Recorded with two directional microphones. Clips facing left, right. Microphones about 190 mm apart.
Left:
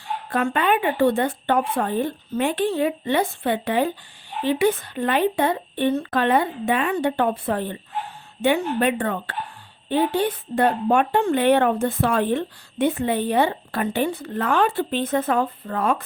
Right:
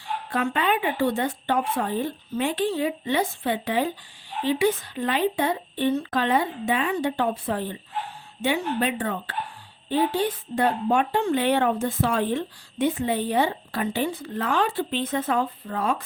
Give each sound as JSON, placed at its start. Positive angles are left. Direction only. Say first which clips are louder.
{"t": 0.3, "sound": "a woman's voice", "louder": "left 3 dB", "side_deg": 55}